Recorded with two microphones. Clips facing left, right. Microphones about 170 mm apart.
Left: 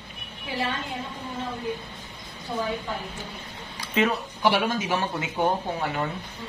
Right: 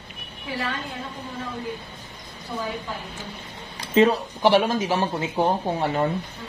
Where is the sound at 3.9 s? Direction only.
35° right (ahead or behind).